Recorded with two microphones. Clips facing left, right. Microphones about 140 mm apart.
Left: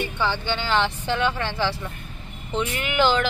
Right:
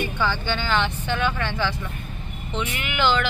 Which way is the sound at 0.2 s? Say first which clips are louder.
Left 1 dB; 25° left (ahead or behind).